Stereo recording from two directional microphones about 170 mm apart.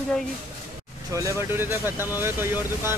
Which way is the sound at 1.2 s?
15° right (ahead or behind).